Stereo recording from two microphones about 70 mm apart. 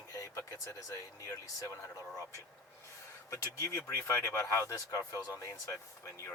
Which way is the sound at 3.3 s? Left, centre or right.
Left.